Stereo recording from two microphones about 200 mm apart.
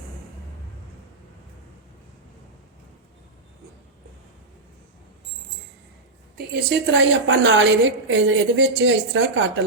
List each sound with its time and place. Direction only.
6.3 s a woman's voice: 55° right (ahead or behind)